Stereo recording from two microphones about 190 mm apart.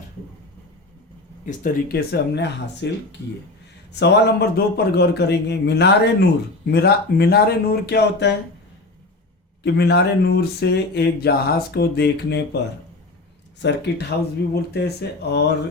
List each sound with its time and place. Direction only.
1.5 s speech: 50° left (ahead or behind)
9.6 s speech: 60° left (ahead or behind)
13.6 s speech: 65° left (ahead or behind)